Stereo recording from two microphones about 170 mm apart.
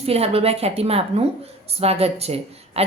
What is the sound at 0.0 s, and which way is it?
A woman's voice, 35° right (ahead or behind).